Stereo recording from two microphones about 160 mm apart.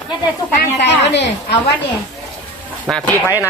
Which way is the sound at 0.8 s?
90° left.